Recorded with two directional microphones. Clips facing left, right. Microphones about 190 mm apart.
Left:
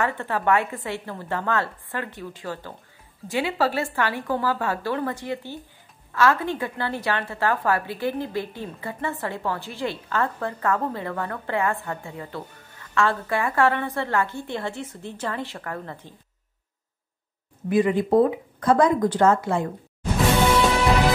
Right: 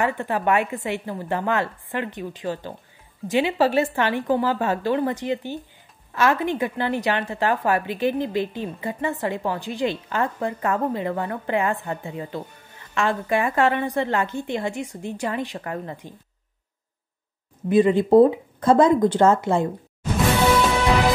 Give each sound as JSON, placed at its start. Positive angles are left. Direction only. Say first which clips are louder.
{"t": 0.0, "sound": "a woman's voice", "louder": "right 2 dB", "side_deg": -15}
{"t": 17.6, "sound": "a woman's voice", "louder": "right 3 dB", "side_deg": -25}